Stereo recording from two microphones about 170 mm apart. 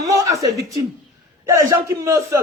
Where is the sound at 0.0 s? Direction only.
20° right (ahead or behind).